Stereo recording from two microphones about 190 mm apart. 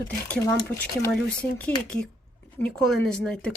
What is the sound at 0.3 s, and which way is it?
Speech, 10° left (ahead or behind).